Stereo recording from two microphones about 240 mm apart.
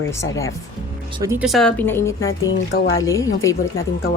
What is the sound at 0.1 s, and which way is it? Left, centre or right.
Speech, centre.